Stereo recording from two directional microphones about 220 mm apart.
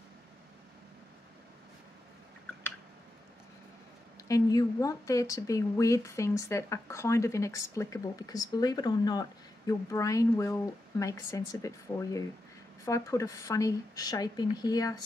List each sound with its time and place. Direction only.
4.3 s speech: 15° left (ahead or behind)